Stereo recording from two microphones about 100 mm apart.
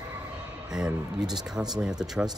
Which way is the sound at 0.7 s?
5° right (ahead or behind).